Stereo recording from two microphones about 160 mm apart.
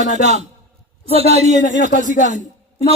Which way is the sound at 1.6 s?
50° left (ahead or behind).